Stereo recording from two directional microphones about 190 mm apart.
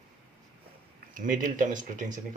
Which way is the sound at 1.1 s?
45° right (ahead or behind).